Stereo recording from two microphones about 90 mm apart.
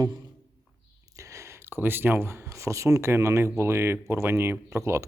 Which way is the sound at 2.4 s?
35° right (ahead or behind).